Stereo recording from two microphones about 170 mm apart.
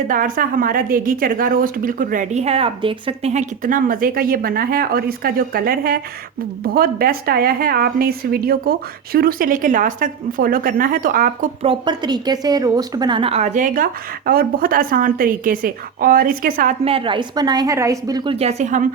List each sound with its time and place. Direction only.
0.1 s a woman's voice: 55° right (ahead or behind)
11.6 s a woman's voice: 30° right (ahead or behind); by 16.7 s 55° right (ahead or behind)
16.8 s a woman's voice: 30° right (ahead or behind); by 18.9 s 45° right (ahead or behind)